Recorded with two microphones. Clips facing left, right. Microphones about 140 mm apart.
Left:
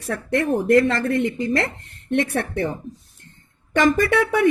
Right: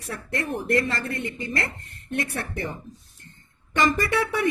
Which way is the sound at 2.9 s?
Centre (ahead or behind).